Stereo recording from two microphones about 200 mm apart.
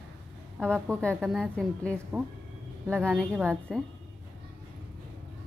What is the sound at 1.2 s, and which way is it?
A woman's voice, centre (ahead or behind).